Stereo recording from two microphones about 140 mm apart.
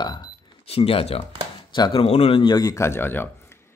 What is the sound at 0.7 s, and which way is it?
Speech, 45° left (ahead or behind).